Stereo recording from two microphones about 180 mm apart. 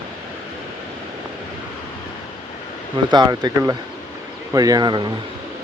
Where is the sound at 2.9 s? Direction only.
25° right (ahead or behind).